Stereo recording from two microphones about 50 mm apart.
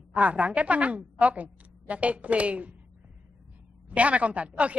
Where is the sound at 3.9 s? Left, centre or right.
Right.